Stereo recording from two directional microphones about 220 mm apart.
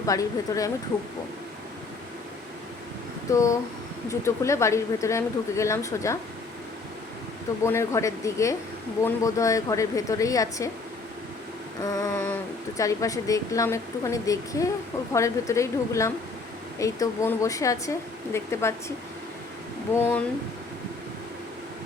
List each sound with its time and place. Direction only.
0.0 s a woman's voice: 15° left (ahead or behind)
3.2 s a woman's voice: 15° left (ahead or behind)
7.6 s a woman's voice: 10° left (ahead or behind)
11.8 s a woman's voice: 15° left (ahead or behind)
19.9 s a woman's voice: 10° left (ahead or behind)